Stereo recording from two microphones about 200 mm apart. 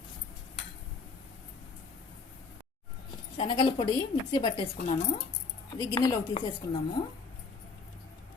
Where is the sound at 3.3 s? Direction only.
20° left (ahead or behind).